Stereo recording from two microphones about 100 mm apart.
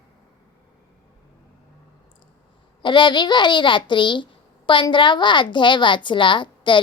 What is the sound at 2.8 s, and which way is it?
A woman's voice, 50° left (ahead or behind).